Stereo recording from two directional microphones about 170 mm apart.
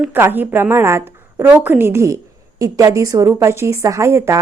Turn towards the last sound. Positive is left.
turn(degrees=-15)  # may be behind; listen again after turning